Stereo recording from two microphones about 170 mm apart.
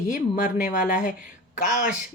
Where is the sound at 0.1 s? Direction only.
50° left (ahead or behind).